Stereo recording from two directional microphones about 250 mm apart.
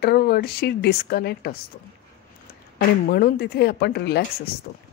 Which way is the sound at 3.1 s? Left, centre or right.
Left.